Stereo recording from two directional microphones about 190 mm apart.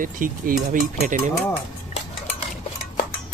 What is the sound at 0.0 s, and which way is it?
Speech, 45° right (ahead or behind).